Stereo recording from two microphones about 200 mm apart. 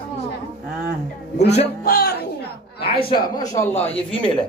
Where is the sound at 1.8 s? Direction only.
50° left (ahead or behind).